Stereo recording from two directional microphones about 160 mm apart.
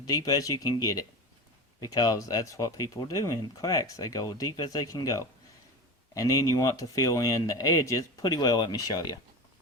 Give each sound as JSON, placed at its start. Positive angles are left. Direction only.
{"t": 0.0, "sound": "speech", "side_deg": 25}